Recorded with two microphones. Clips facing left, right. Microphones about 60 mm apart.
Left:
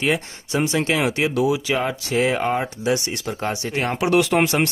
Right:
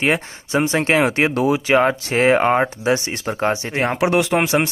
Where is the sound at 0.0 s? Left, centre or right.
Right.